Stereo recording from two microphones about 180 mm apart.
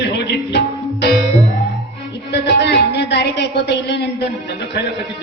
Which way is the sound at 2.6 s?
70° left (ahead or behind).